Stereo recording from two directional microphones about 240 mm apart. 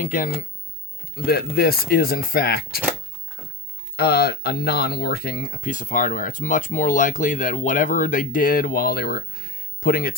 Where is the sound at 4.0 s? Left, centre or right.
Left.